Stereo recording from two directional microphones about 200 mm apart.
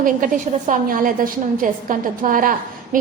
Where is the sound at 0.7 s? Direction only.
45° right (ahead or behind).